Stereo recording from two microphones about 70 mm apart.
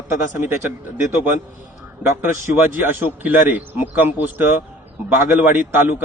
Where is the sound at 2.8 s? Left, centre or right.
Right.